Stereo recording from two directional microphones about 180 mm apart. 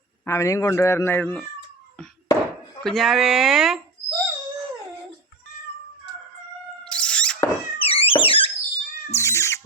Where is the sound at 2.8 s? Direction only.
Centre (ahead or behind).